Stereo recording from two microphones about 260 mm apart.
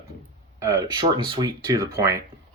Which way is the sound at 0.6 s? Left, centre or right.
Centre.